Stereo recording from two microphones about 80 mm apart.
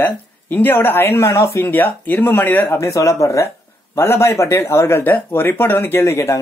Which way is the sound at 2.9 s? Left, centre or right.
Left.